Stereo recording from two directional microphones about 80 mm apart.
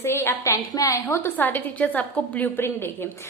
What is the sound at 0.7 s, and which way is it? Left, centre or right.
Speech, left.